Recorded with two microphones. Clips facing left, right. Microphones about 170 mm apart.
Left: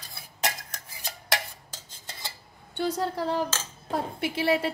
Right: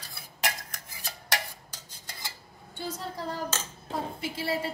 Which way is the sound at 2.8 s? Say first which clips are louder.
Left 8 dB; 75° left (ahead or behind).